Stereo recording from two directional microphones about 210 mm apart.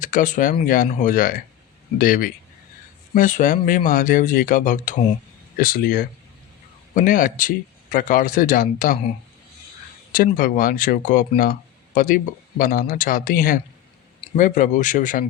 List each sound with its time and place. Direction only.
0.0 s speech: 40° left (ahead or behind)
10.1 s speech: 40° left (ahead or behind)